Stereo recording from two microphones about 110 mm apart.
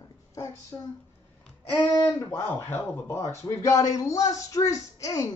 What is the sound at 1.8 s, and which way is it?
Speech, 35° left (ahead or behind).